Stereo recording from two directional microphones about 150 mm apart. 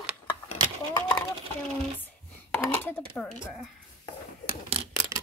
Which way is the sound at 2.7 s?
15° left (ahead or behind).